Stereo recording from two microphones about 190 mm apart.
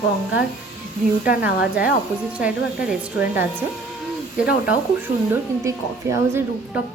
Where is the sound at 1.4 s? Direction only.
5° right (ahead or behind).